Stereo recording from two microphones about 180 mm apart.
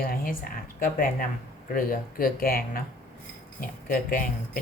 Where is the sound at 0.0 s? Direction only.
55° left (ahead or behind).